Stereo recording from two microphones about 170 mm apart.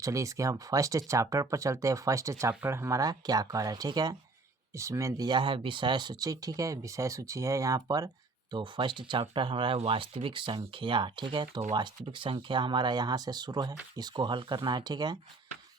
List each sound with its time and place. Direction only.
0.0 s speech: 20° right (ahead or behind)